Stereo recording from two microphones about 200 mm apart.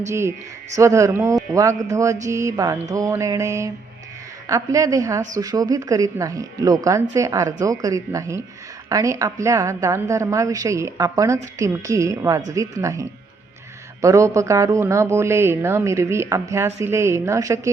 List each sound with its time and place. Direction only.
0.1 s speech: 15° right (ahead or behind)